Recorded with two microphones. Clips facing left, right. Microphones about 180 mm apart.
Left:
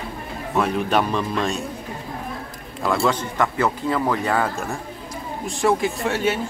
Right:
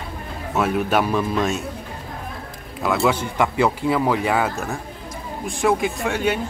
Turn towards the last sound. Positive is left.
turn(degrees=0)  # may be behind; listen again after turning